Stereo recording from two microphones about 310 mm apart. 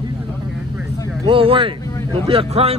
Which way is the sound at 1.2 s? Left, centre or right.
Centre.